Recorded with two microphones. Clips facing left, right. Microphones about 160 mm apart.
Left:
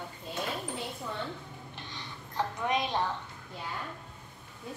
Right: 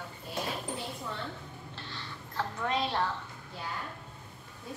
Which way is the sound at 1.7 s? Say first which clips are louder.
Right 1 dB; 15° left (ahead or behind).